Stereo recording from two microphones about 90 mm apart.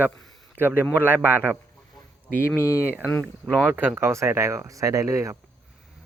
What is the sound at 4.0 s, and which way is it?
Speech, 30° right (ahead or behind).